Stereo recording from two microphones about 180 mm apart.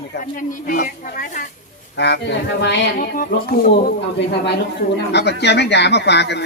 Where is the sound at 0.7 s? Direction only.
50° left (ahead or behind).